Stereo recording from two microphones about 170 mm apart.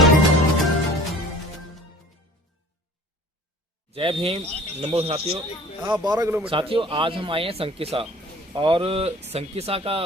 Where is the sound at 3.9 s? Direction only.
35° right (ahead or behind).